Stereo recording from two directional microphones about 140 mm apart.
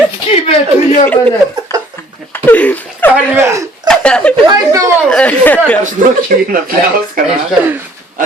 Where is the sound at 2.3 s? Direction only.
15° left (ahead or behind).